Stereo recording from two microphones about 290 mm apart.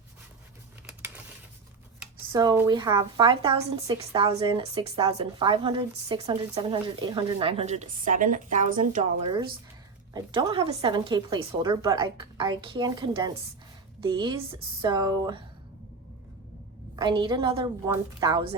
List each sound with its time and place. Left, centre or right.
0.9 s typing: centre
2.0 s speech: centre
16.9 s speech: centre